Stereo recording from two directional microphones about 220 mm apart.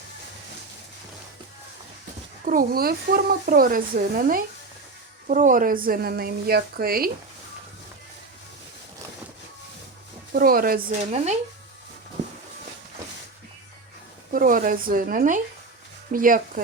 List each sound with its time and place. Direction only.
2.4 s a woman's voice: 40° right (ahead or behind)
10.3 s speech: 40° right (ahead or behind)
14.3 s speech: 40° right (ahead or behind)